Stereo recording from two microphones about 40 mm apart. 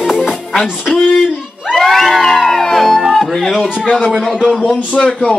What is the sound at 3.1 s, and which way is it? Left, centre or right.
Speech, centre.